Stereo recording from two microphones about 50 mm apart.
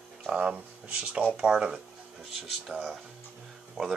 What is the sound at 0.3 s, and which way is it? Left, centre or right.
Speech, centre.